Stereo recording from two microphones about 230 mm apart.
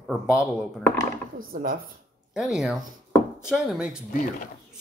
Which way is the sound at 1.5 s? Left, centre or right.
Right.